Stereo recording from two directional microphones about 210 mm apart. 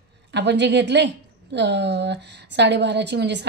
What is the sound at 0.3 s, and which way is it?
A woman's voice, 55° right (ahead or behind).